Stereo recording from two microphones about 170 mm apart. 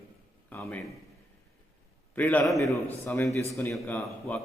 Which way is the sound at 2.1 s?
10° left (ahead or behind).